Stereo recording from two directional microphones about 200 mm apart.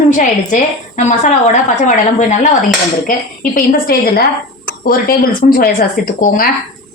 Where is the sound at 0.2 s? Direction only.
40° left (ahead or behind).